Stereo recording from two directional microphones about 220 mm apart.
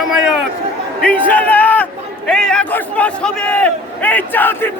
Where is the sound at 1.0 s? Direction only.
5° left (ahead or behind).